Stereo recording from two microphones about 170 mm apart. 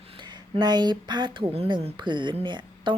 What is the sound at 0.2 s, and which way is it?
Speech, 25° right (ahead or behind).